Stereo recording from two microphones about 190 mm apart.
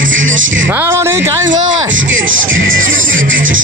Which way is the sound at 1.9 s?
90° right.